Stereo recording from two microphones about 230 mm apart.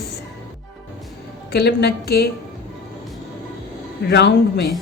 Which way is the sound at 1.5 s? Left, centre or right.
Left.